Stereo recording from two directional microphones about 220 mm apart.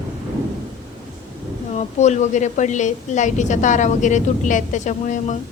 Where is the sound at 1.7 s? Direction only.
30° left (ahead or behind).